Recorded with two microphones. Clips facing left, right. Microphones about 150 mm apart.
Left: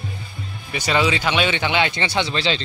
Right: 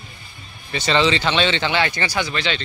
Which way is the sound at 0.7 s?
10° left (ahead or behind).